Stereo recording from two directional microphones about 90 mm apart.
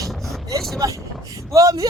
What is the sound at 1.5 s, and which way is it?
Speech, 40° right (ahead or behind).